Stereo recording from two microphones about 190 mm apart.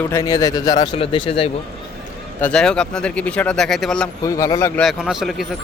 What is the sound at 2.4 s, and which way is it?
Speech, 5° left (ahead or behind).